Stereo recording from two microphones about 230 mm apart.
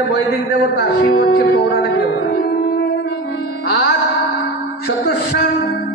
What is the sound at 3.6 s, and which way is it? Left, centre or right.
Music, left.